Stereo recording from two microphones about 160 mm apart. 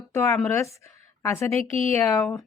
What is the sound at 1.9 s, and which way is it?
Speech, 10° left (ahead or behind).